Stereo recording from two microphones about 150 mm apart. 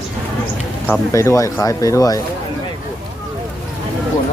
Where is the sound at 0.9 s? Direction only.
20° left (ahead or behind).